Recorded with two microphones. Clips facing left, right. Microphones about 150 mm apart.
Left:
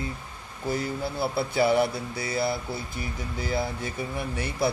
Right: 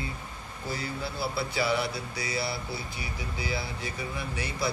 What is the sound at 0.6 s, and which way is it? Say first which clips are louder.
Speech: left 6 dB; 50° left (ahead or behind).